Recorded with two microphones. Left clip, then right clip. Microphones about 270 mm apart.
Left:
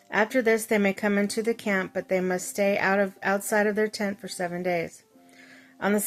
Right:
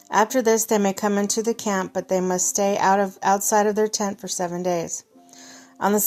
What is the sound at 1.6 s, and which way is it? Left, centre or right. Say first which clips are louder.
Speech: right 3 dB; right.